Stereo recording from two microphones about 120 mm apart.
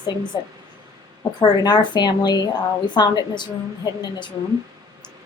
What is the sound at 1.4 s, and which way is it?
Speech, 35° left (ahead or behind).